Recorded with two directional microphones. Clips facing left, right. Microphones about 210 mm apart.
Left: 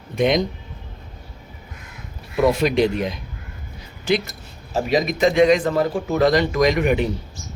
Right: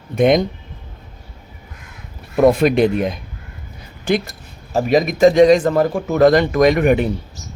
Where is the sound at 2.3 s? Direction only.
50° right (ahead or behind).